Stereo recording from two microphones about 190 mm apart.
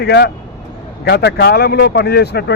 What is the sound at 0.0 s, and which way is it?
Speech, 60° left (ahead or behind).